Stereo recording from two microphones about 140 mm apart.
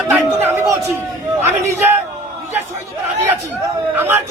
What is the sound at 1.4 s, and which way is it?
Speech, 15° right (ahead or behind).